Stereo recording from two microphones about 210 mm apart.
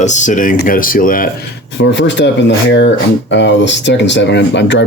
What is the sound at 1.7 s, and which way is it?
Speech, 60° left (ahead or behind).